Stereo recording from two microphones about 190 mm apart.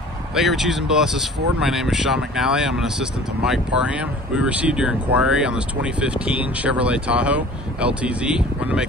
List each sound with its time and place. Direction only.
0.3 s speech: centre (ahead or behind)